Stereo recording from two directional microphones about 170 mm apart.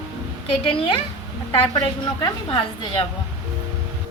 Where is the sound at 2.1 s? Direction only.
30° left (ahead or behind).